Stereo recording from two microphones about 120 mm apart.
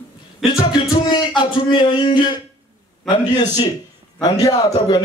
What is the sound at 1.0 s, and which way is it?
A man's voice, 40° left (ahead or behind).